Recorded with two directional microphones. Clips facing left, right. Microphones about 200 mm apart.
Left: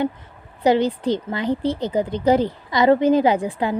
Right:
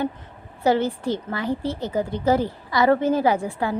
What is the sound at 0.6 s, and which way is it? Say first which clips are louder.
A woman's voice: left 3 dB; 15° left (ahead or behind).